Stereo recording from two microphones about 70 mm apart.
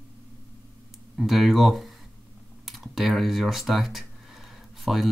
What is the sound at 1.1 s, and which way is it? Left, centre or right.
Speech, centre.